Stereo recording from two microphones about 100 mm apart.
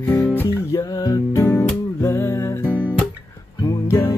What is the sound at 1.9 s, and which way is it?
Music, 25° left (ahead or behind).